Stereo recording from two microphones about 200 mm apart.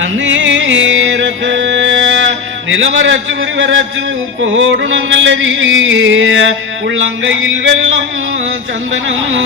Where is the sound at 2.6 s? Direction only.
70° right (ahead or behind).